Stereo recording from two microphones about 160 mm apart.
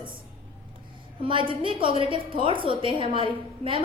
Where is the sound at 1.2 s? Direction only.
35° right (ahead or behind).